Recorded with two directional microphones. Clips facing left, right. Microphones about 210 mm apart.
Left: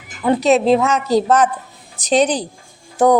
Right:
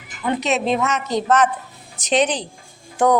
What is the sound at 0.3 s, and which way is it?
A woman's voice, 35° left (ahead or behind).